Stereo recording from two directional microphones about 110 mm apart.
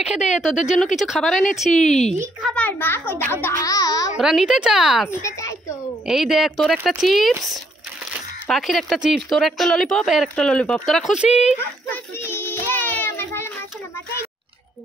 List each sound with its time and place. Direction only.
0.0 s speech: 10° right (ahead or behind)
2.5 s a child's voice: 15° left (ahead or behind)
3.5 s speech: 30° left (ahead or behind)
4.2 s speech: 5° right (ahead or behind)
5.2 s a woman's voice: 30° left (ahead or behind)
6.0 s speech: 5° right (ahead or behind)
8.5 s speech: centre (ahead or behind)
11.1 s speech: 10° right (ahead or behind)
11.9 s child singing: 20° left (ahead or behind)